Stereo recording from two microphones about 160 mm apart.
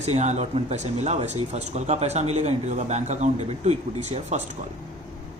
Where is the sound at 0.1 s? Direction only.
45° right (ahead or behind).